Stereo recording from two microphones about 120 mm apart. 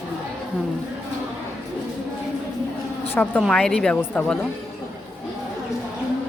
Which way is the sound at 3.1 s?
15° left (ahead or behind).